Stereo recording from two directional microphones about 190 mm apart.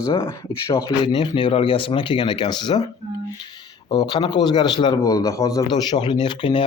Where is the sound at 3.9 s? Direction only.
20° left (ahead or behind).